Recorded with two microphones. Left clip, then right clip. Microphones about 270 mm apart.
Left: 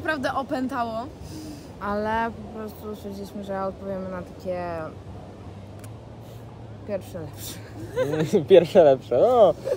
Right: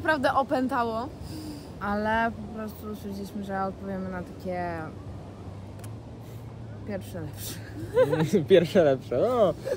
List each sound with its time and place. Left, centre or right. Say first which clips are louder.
0.0 s a woman's voice: right 2 dB; centre
1.8 s speech: left 1 dB; centre
7.4 s speech: left 1 dB; centre
8.3 s speech: left 5 dB; centre